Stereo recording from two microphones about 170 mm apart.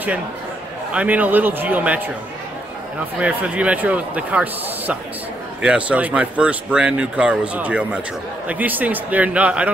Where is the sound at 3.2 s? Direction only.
5° right (ahead or behind).